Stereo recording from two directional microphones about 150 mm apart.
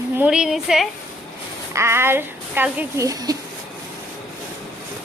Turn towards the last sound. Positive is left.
turn(degrees=-25)  # may be behind; listen again after turning